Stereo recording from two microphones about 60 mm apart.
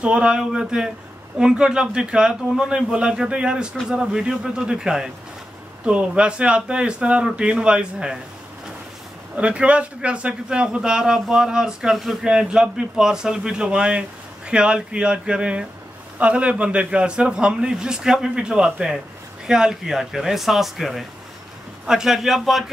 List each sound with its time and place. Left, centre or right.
0.0 s a man's voice: centre
9.4 s a man's voice: centre